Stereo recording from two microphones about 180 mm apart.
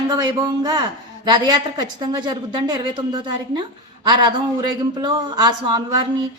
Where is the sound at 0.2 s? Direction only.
20° right (ahead or behind).